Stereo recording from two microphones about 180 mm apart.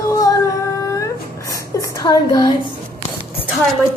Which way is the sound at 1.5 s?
15° left (ahead or behind).